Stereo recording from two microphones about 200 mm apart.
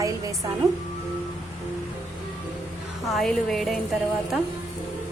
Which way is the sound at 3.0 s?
Centre (ahead or behind).